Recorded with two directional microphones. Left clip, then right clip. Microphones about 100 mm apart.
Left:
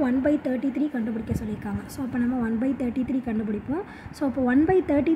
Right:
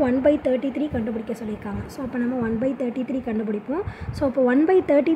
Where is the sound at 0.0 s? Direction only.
10° right (ahead or behind).